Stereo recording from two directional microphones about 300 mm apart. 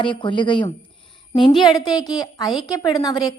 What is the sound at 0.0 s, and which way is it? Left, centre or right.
A woman's voice, centre.